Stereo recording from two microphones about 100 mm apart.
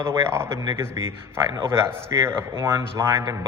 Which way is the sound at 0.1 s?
25° right (ahead or behind).